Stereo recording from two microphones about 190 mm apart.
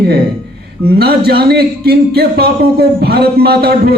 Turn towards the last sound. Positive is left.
turn(degrees=-55)  # may be behind; listen again after turning